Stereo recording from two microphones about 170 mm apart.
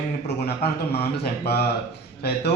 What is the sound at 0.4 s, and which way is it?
Mantra, 70° left (ahead or behind).